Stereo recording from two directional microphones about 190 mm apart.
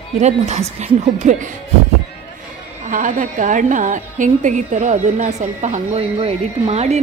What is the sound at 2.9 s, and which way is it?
A woman's voice, 45° right (ahead or behind).